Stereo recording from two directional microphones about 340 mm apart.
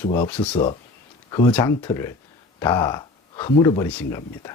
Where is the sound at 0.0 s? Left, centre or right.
Centre.